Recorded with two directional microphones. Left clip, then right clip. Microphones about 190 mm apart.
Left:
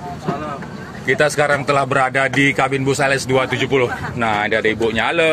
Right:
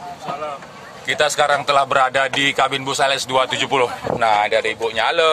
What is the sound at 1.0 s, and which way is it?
A man's voice, 15° right (ahead or behind).